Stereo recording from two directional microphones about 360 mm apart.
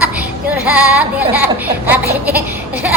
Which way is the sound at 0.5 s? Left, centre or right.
Centre.